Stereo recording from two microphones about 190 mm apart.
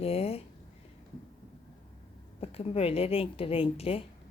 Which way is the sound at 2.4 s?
30° left (ahead or behind).